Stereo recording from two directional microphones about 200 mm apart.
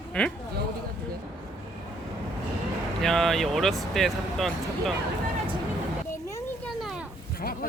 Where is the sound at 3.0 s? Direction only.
Centre (ahead or behind).